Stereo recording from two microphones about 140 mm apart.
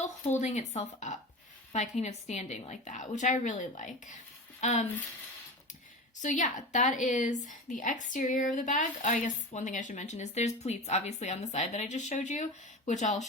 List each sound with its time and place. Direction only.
0.0 s a woman's voice: 55° left (ahead or behind)
6.2 s speech: 60° left (ahead or behind)